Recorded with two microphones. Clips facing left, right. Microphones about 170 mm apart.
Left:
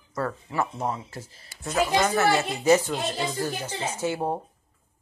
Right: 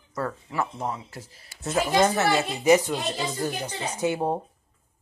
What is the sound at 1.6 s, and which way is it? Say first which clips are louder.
Speech: right 2 dB; 30° right (ahead or behind).